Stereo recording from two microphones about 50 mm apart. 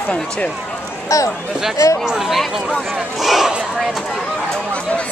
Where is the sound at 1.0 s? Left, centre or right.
Left.